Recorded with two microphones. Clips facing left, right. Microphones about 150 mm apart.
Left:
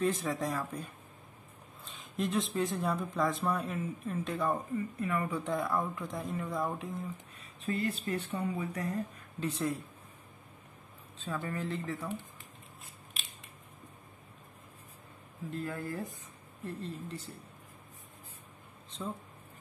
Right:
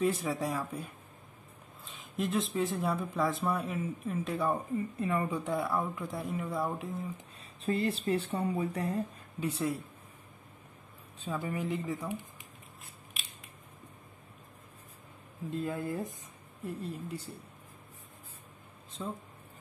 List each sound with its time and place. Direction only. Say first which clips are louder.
0.0 s speech: right 1 dB; 10° right (ahead or behind)
1.9 s speech: right 1 dB; centre (ahead or behind)
5.0 s speech: right 2 dB; 25° right (ahead or behind)
5.4 s speech: right 1 dB; 10° right (ahead or behind)
7.6 s speech: right 3 dB; 30° right (ahead or behind)
9.4 s speech: right 1 dB; 10° right (ahead or behind)
11.1 s speech: right 2 dB; 15° right (ahead or behind)
15.5 s speech: right 3 dB; 20° right (ahead or behind)